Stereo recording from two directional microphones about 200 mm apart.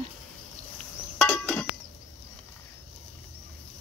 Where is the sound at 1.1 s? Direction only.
5° left (ahead or behind).